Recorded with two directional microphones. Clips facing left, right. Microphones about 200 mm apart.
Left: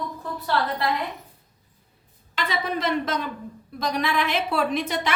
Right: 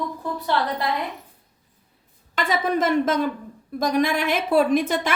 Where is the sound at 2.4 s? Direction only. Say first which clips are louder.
Right 5 dB; 50° right (ahead or behind).